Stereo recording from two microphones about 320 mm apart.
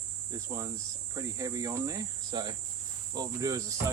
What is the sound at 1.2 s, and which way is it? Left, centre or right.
Speech, centre.